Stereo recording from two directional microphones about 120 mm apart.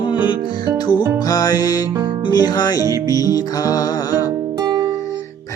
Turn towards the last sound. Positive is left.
turn(degrees=35)  # may be behind; listen again after turning